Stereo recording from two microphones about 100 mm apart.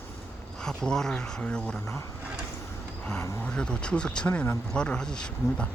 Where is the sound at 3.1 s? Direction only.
10° left (ahead or behind).